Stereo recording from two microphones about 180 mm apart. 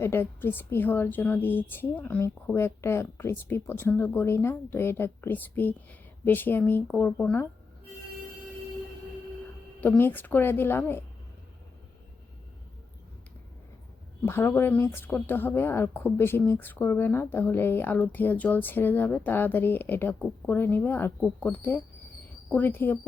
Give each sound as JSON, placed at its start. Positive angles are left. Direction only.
{"t": 0.0, "sound": "a woman's voice", "side_deg": 10}
{"t": 9.8, "sound": "a woman's voice", "side_deg": 10}
{"t": 14.2, "sound": "a woman's voice", "side_deg": 10}